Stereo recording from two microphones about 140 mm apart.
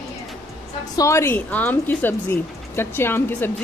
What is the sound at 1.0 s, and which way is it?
Speech, 20° left (ahead or behind).